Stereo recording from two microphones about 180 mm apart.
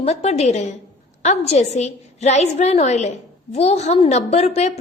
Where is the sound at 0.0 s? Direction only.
35° left (ahead or behind).